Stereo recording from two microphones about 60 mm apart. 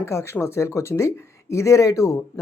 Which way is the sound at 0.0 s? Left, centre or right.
Left.